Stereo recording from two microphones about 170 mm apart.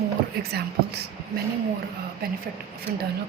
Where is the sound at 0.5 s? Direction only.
65° right (ahead or behind).